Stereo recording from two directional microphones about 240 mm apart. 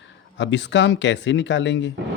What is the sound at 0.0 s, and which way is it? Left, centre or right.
Speech, left.